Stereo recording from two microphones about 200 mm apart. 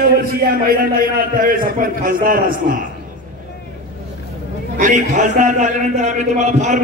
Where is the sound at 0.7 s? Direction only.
45° right (ahead or behind).